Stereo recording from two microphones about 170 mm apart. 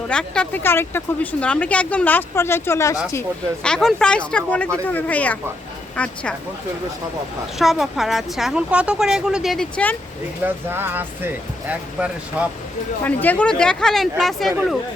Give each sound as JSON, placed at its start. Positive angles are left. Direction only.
{"t": 0.1, "sound": "speech", "side_deg": 5}
{"t": 3.6, "sound": "speech", "side_deg": 5}
{"t": 7.6, "sound": "speech", "side_deg": 0}
{"t": 10.4, "sound": "speech", "side_deg": -10}
{"t": 13.1, "sound": "speech", "side_deg": 10}